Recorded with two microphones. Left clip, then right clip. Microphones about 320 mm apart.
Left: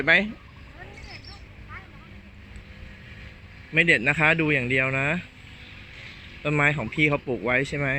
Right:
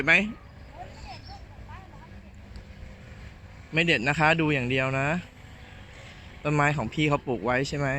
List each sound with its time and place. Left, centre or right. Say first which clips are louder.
0.0 s speech: left 2 dB; centre
3.8 s speech: left 4 dB; centre
6.4 s speech: left 2 dB; centre